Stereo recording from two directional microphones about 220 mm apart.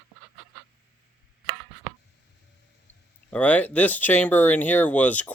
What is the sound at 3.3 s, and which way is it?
Speech, 5° left (ahead or behind).